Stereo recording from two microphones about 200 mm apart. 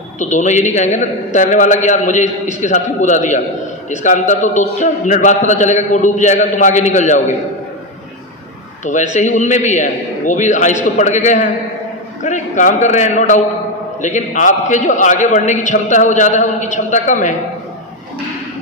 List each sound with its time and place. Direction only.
0.2 s a man's voice: 35° left (ahead or behind)
8.8 s a man's voice: 35° left (ahead or behind)